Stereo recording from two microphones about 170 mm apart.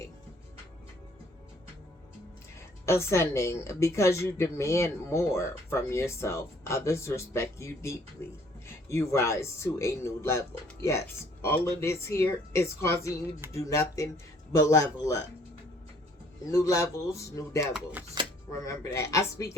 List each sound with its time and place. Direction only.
2.8 s a woman's voice: 15° left (ahead or behind)
16.5 s a woman's voice: 15° left (ahead or behind)
18.2 s a sound: 25° right (ahead or behind)
18.6 s a woman's voice: 20° left (ahead or behind)